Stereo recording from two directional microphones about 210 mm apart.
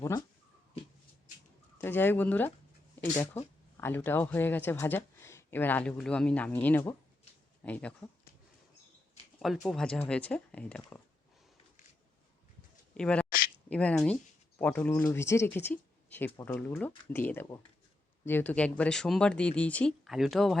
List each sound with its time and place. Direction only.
0.0 s speech: 15° left (ahead or behind)
1.8 s speech: 10° left (ahead or behind)
9.4 s speech: centre (ahead or behind)
12.9 s a sound: 5° left (ahead or behind)
13.7 s speech: 5° left (ahead or behind)